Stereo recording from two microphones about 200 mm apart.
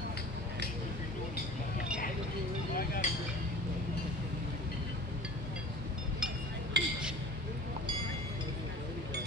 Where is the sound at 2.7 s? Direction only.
45° left (ahead or behind).